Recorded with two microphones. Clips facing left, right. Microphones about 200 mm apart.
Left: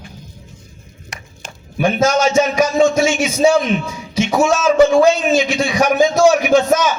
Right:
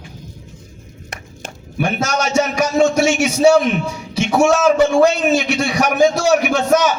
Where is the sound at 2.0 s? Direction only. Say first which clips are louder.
Left 5 dB; 65° right (ahead or behind).